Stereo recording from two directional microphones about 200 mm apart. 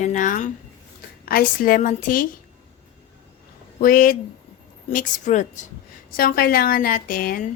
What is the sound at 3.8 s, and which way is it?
A woman's voice, 45° left (ahead or behind).